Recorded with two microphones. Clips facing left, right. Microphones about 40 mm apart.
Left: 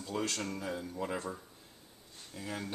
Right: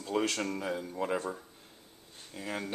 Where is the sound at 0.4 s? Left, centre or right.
Right.